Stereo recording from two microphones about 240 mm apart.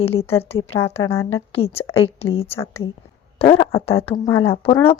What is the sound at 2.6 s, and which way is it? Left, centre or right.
Speech, centre.